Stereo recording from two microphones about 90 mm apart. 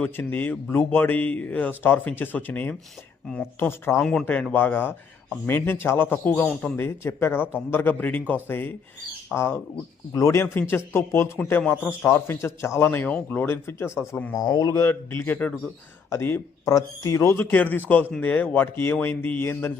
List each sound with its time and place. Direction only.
0.0 s a man's voice: 20° left (ahead or behind)
4.0 s speech: 10° left (ahead or behind)
4.5 s a man's voice: 20° left (ahead or behind)
14.3 s speech: 45° left (ahead or behind)
14.8 s speech: 25° left (ahead or behind)
16.0 s speech: 30° left (ahead or behind)
16.6 s speech: 40° left (ahead or behind)
17.3 s a man's voice: 20° left (ahead or behind)